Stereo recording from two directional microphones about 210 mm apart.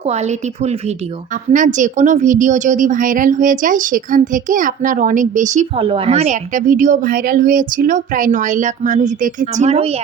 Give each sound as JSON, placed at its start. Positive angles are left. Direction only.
{"t": 0.0, "sound": "a woman's voice", "side_deg": -30}